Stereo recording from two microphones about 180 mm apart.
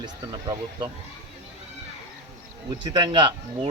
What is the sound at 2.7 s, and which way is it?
Speech, 25° right (ahead or behind).